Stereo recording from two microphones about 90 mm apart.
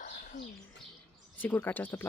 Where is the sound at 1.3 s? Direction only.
20° left (ahead or behind).